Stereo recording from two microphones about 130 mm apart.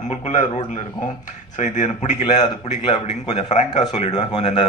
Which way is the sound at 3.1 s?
60° left (ahead or behind).